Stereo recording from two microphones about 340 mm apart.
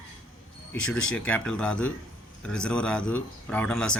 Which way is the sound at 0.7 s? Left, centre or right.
Centre.